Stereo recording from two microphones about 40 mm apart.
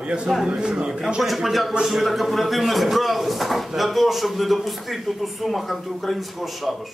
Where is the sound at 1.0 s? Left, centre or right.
Centre.